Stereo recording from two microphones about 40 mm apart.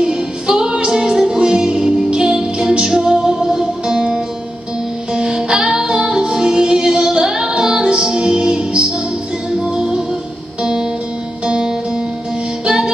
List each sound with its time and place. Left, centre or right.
0.0 s music: right